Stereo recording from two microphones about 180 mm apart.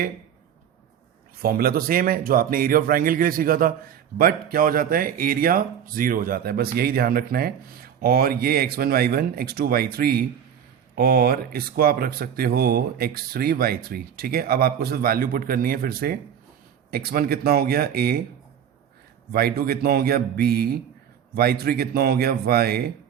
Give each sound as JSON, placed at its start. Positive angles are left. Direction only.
{"t": 1.4, "sound": "speech", "side_deg": -55}
{"t": 19.3, "sound": "speech", "side_deg": -60}